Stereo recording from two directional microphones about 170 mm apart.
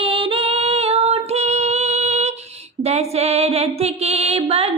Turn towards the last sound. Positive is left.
turn(degrees=-35)  # may be behind; listen again after turning